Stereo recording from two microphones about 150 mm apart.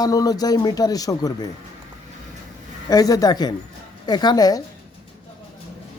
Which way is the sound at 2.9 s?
25° left (ahead or behind).